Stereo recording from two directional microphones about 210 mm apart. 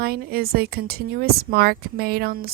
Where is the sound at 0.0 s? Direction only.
45° right (ahead or behind).